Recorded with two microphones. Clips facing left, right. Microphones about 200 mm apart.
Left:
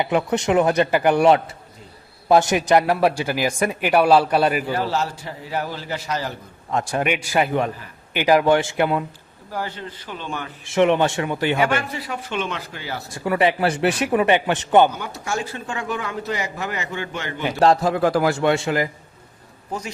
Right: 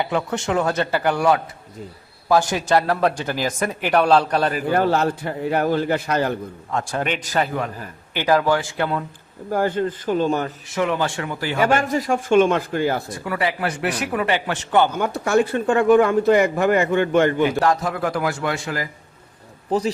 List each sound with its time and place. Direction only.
0.0 s speech: 20° left (ahead or behind)
4.7 s speech: 55° right (ahead or behind)
6.7 s speech: 15° left (ahead or behind)
9.5 s speech: 50° right (ahead or behind)
10.8 s speech: 25° left (ahead or behind)
11.6 s speech: 45° right (ahead or behind)
13.2 s speech: 25° left (ahead or behind)
14.9 s speech: 55° right (ahead or behind)
17.6 s speech: 30° left (ahead or behind)